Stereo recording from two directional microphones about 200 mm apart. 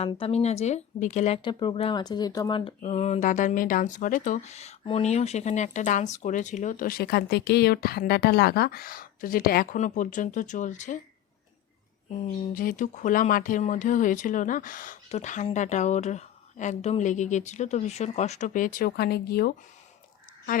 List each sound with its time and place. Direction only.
0.0 s speech: 30° left (ahead or behind)
1.5 s speech: 25° left (ahead or behind)
12.2 s speech: 40° left (ahead or behind)